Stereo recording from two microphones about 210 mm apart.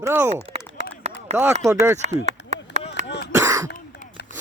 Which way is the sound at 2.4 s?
60° left (ahead or behind).